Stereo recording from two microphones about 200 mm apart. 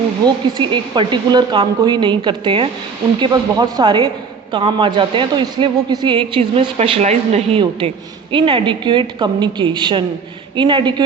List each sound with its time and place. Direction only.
0.5 s a woman's voice: 25° right (ahead or behind)